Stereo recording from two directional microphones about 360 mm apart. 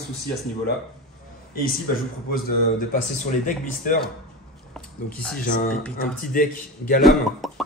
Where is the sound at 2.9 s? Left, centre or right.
Left.